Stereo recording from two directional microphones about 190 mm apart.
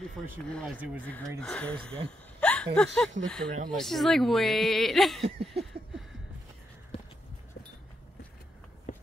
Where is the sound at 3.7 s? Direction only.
Centre (ahead or behind).